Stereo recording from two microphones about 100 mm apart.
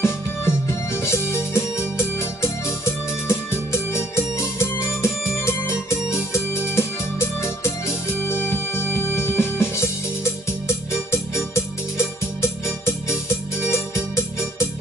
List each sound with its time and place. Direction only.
0.0 s music: 25° left (ahead or behind)